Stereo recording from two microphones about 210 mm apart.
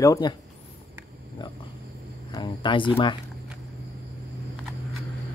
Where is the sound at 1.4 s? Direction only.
20° left (ahead or behind).